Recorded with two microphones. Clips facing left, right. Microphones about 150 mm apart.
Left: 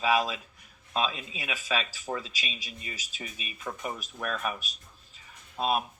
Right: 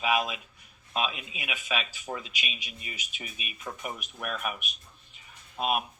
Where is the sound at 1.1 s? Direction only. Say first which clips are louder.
Left 2 dB; 30° left (ahead or behind).